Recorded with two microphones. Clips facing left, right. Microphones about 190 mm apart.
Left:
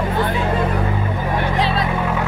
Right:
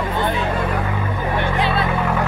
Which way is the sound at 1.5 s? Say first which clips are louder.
Left 1 dB; 35° left (ahead or behind).